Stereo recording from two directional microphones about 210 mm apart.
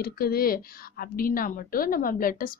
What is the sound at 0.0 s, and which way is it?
Speech, 45° left (ahead or behind).